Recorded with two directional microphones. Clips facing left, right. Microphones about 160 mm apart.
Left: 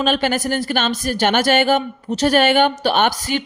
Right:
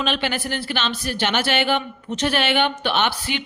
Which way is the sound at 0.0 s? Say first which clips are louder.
Left 6 dB; 45° left (ahead or behind).